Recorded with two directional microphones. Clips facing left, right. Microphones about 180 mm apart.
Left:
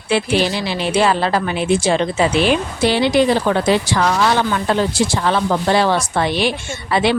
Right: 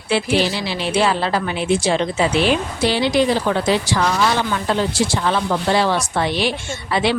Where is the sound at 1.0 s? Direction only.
55° left (ahead or behind).